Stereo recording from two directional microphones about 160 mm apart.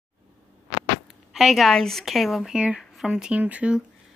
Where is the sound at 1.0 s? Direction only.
Centre (ahead or behind).